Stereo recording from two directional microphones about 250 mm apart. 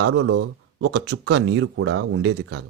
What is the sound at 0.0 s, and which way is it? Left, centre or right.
Speech, right.